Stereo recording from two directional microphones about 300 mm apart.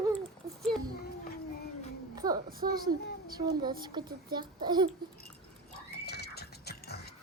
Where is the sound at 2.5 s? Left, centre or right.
Right.